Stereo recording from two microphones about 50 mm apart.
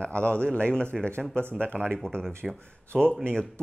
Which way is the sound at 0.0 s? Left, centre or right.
Left.